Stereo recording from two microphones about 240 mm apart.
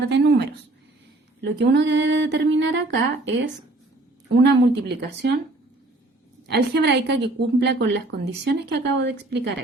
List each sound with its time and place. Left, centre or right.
0.1 s a woman's voice: right
6.5 s a woman's voice: right